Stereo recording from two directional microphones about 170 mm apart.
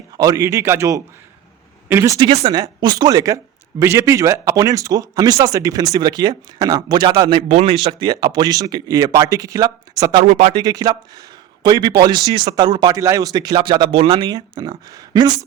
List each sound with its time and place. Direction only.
0.2 s a man's voice: 20° right (ahead or behind)